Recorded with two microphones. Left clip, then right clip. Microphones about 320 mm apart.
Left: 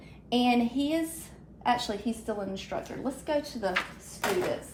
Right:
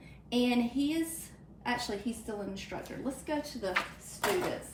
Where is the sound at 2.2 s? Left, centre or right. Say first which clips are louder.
Left 5 dB; centre.